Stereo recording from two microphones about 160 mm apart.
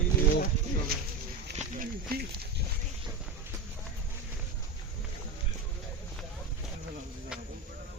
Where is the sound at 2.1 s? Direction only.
75° right (ahead or behind).